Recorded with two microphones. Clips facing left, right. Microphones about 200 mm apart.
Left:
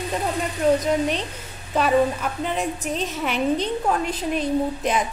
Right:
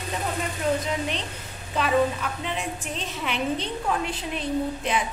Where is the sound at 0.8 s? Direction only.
45° left (ahead or behind).